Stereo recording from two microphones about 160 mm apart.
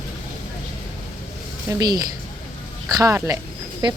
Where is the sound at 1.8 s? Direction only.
25° right (ahead or behind).